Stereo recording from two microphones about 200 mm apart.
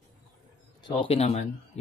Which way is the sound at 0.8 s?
25° left (ahead or behind).